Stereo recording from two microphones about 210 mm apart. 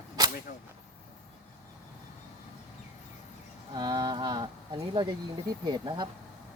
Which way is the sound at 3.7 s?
20° right (ahead or behind).